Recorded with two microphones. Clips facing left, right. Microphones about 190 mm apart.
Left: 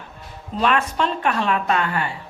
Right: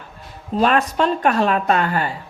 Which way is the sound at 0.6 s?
40° right (ahead or behind).